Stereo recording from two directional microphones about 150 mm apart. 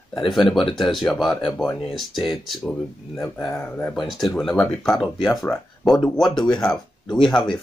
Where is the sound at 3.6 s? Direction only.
10° left (ahead or behind).